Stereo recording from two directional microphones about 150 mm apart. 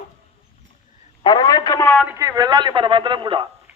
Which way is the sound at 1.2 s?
30° left (ahead or behind).